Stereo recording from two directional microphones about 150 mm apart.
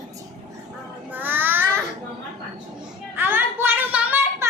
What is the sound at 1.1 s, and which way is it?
Child singing, 15° right (ahead or behind).